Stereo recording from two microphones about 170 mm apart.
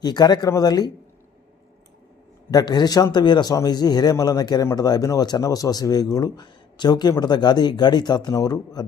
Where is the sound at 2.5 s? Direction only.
25° left (ahead or behind).